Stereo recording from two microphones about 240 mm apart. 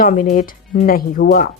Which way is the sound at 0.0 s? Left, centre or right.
Left.